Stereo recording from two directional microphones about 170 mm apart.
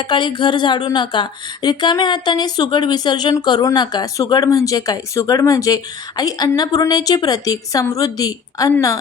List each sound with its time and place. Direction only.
0.0 s speech: 30° left (ahead or behind)